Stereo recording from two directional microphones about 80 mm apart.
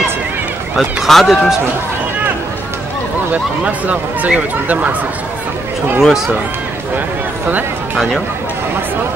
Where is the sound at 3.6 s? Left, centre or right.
Centre.